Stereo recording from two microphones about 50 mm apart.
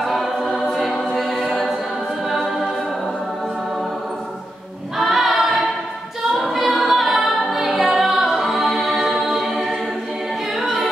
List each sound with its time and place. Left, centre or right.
0.0 s choir: centre
1.5 s music: centre
4.9 s choir: centre
6.4 s a capella: centre